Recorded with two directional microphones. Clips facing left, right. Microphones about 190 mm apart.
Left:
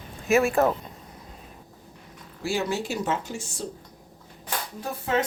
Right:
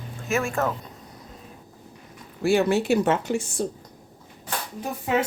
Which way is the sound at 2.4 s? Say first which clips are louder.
Right 7 dB; 60° right (ahead or behind).